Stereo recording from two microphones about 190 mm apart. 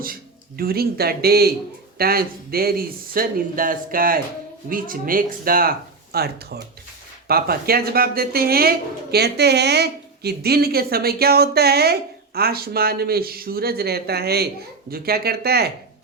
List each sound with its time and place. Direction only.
0.0 s speech: 50° right (ahead or behind)